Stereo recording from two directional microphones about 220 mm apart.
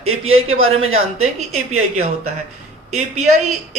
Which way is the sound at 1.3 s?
30° right (ahead or behind).